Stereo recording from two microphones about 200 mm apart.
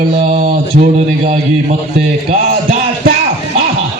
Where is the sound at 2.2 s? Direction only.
30° right (ahead or behind).